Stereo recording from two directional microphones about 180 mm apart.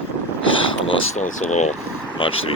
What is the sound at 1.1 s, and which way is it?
Speech, 40° left (ahead or behind).